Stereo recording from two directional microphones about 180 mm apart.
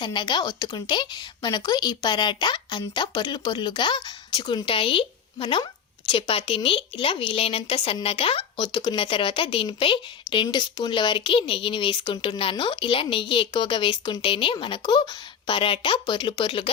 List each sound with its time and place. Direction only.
0.0 s speech: 25° left (ahead or behind)